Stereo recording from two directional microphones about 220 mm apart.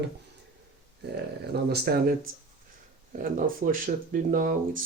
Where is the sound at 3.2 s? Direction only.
40° right (ahead or behind).